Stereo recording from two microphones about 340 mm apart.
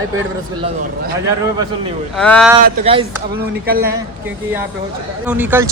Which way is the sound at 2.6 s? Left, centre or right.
Centre.